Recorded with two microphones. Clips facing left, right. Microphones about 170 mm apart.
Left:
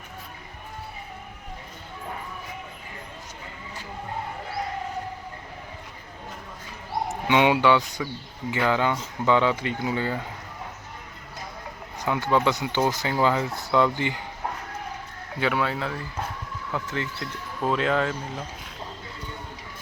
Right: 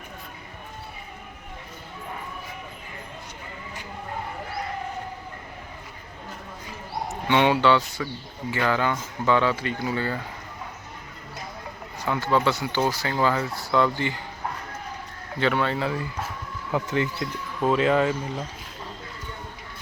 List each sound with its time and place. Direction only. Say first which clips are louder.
7.3 s speech: even; 15° left (ahead or behind)
11.9 s speech: even; 15° left (ahead or behind)
15.4 s speech: right 2 dB; 5° left (ahead or behind)
16.7 s speech: right 6 dB; 15° right (ahead or behind)
17.6 s speech: right 3 dB; centre (ahead or behind)